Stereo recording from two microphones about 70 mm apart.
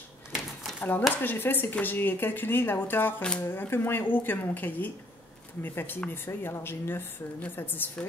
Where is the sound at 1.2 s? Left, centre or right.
Left.